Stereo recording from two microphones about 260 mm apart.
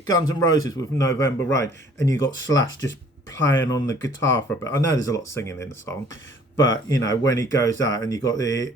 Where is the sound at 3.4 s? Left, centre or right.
Left.